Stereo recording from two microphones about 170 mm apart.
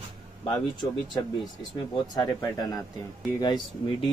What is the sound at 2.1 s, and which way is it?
Speech, 25° left (ahead or behind).